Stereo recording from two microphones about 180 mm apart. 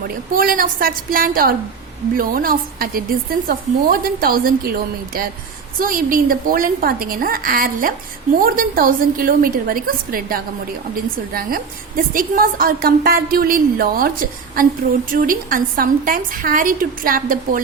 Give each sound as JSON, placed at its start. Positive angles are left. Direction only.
{"t": 0.3, "sound": "a woman's voice", "side_deg": -50}